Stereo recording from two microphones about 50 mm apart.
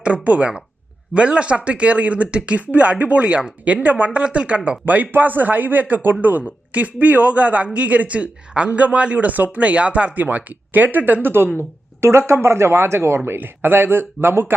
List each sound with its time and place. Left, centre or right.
0.0 s speech: right
11.9 s speech: right